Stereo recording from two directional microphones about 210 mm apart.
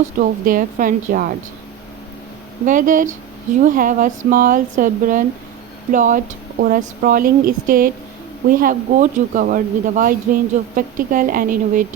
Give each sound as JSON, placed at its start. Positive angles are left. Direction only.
{"t": 0.2, "sound": "speech", "side_deg": -40}
{"t": 2.6, "sound": "speech", "side_deg": -40}